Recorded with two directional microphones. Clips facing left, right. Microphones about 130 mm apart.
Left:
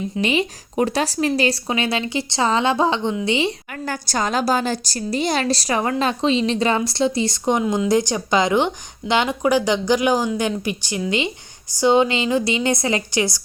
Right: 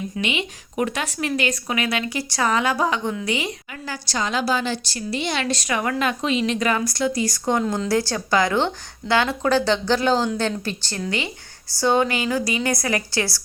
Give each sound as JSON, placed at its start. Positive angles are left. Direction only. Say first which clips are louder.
{"t": 0.2, "sound": "a woman's voice", "louder": "left 7 dB", "side_deg": 35}
{"t": 3.7, "sound": "a woman's voice", "louder": "left 5 dB", "side_deg": 50}